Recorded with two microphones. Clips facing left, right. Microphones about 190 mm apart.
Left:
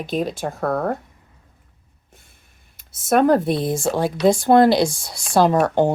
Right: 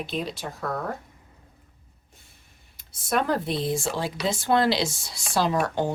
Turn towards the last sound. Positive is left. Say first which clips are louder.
# left 8 dB
turn(degrees=50)  # may be behind; listen again after turning